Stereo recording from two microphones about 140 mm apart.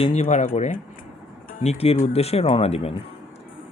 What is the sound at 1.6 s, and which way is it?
Speech, 45° left (ahead or behind).